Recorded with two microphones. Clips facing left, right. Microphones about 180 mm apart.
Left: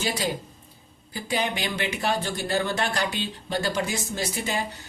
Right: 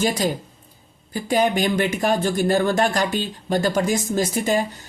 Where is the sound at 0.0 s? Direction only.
45° right (ahead or behind).